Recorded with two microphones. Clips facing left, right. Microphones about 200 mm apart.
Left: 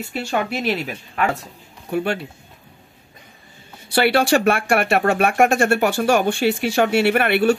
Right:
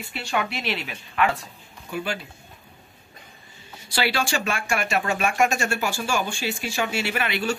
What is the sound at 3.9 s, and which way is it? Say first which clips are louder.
Speech: left 9 dB; 60° left (ahead or behind).